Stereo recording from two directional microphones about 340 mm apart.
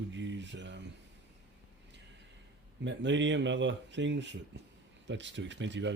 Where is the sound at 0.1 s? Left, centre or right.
Right.